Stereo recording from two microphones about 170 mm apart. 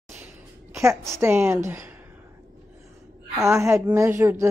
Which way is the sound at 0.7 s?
15° right (ahead or behind).